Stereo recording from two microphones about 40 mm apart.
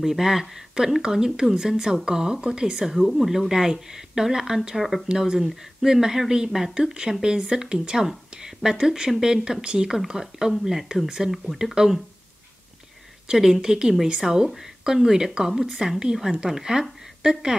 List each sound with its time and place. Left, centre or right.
0.0 s a woman's voice: centre
4.7 s speech: centre
5.0 s a woman's voice: centre
13.3 s a woman's voice: centre